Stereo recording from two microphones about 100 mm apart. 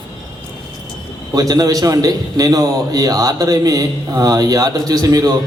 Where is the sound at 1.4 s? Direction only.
40° right (ahead or behind).